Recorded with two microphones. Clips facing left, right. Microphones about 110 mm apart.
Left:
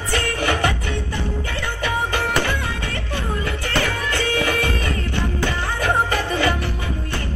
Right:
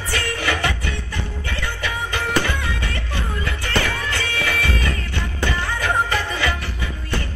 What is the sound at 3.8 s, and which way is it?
Music, 35° left (ahead or behind).